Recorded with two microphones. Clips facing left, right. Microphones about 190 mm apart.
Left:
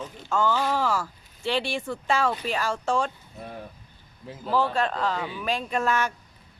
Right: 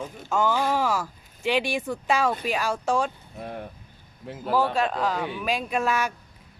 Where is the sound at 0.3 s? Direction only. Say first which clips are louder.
Right 1 dB; 10° right (ahead or behind).